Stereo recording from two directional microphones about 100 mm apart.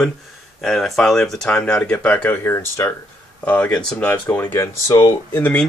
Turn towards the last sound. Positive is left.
turn(degrees=15)  # may be behind; listen again after turning